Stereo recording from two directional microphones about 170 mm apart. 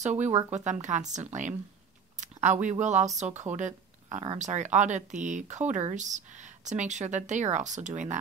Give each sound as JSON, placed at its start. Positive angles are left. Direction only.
{"t": 0.0, "sound": "speech", "side_deg": -45}
{"t": 3.5, "sound": "a sound", "side_deg": -45}
{"t": 4.2, "sound": "speech", "side_deg": -40}